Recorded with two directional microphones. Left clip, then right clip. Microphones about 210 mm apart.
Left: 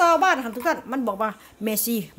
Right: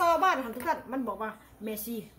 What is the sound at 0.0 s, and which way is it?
A woman's voice, 55° left (ahead or behind).